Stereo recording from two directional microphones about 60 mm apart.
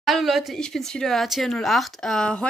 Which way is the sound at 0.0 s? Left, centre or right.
Centre.